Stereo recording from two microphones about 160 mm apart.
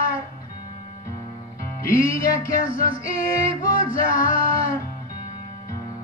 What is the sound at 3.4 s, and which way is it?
Music, 60° left (ahead or behind).